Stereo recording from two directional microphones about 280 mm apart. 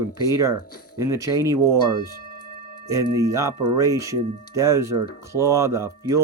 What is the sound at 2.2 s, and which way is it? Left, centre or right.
Tuning fork, left.